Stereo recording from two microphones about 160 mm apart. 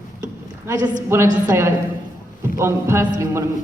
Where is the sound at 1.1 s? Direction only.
15° right (ahead or behind).